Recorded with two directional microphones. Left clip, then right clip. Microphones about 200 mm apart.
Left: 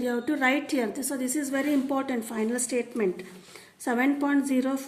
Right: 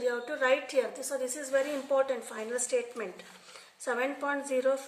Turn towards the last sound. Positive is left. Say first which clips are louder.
# left 2 dB
turn(degrees=40)  # may be behind; listen again after turning